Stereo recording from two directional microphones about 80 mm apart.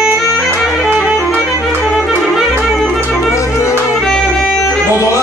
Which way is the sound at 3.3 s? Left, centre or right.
Left.